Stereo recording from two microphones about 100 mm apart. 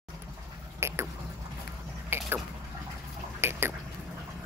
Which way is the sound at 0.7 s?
25° right (ahead or behind).